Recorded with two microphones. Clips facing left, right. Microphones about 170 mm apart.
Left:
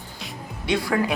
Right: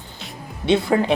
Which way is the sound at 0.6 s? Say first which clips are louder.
Right 5 dB; 25° right (ahead or behind).